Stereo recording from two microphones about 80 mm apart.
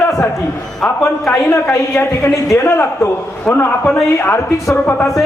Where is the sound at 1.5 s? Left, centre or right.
Left.